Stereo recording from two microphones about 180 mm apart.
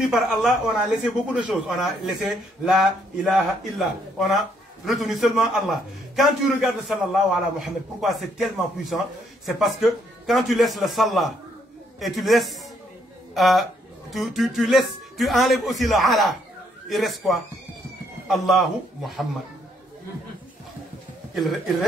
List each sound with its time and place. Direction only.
0.0 s a man's voice: centre (ahead or behind)